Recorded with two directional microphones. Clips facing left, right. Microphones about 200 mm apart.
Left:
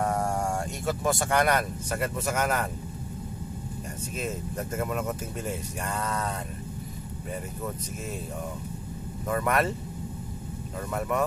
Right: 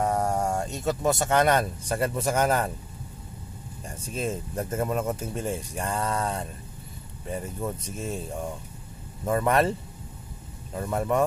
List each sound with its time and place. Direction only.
0.0 s speech: 20° right (ahead or behind)
4.1 s speech: 30° right (ahead or behind)
9.3 s speech: 30° right (ahead or behind)
10.8 s speech: 30° right (ahead or behind)